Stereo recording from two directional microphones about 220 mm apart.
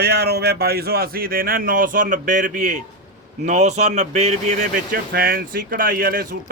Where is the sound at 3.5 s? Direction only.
30° right (ahead or behind).